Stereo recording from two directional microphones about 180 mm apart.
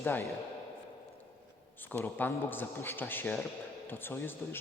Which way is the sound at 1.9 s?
10° left (ahead or behind).